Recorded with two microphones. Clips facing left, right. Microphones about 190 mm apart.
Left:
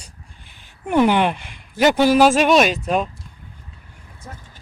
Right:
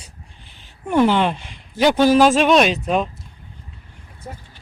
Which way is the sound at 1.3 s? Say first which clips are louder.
Right 2 dB; 55° left (ahead or behind).